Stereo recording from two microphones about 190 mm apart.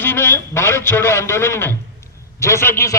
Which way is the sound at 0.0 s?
10° left (ahead or behind).